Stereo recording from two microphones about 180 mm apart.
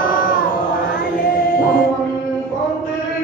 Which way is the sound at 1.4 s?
55° left (ahead or behind).